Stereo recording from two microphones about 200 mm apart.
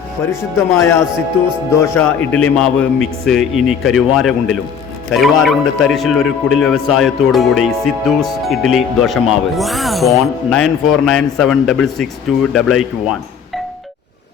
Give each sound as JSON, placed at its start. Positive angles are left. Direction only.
{"t": 0.3, "sound": "a man's voice", "side_deg": 15}